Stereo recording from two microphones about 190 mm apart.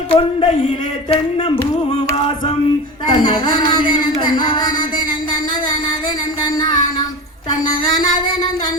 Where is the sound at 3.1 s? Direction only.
25° left (ahead or behind).